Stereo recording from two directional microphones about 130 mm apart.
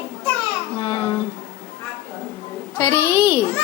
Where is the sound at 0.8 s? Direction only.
30° left (ahead or behind).